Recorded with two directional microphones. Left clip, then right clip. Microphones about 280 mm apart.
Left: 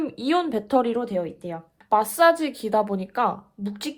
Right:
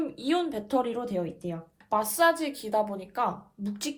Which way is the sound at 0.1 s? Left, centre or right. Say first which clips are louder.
Left 5 dB; left.